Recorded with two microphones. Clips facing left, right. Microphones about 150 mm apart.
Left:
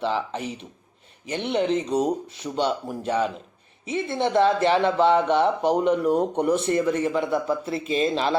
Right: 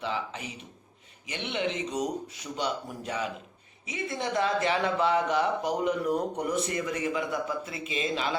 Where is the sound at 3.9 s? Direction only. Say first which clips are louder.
Left 8 dB; 30° left (ahead or behind).